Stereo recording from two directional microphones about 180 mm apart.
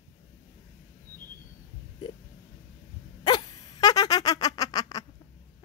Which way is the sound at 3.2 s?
25° left (ahead or behind).